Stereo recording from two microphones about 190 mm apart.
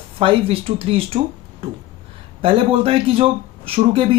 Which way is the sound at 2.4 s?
30° right (ahead or behind).